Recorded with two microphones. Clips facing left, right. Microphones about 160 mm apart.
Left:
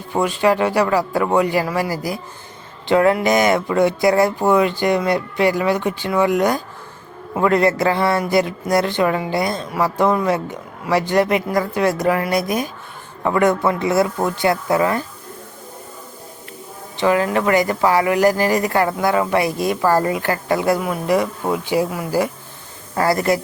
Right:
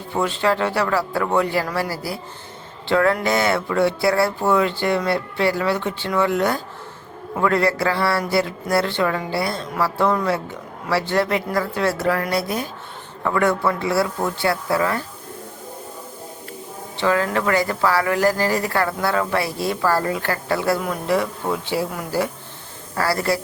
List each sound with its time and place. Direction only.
0.1 s speech: 10° left (ahead or behind)
17.0 s speech: 15° left (ahead or behind)